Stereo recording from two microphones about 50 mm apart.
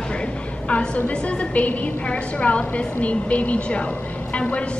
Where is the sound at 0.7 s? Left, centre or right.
Left.